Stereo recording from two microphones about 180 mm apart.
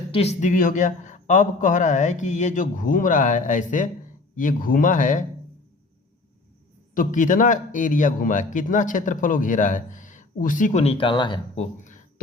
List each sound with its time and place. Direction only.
0.1 s a man's voice: 35° left (ahead or behind)
6.9 s a man's voice: 50° left (ahead or behind)